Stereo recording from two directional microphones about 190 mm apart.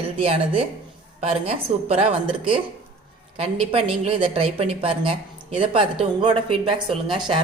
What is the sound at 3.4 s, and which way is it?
A woman's voice, 30° right (ahead or behind).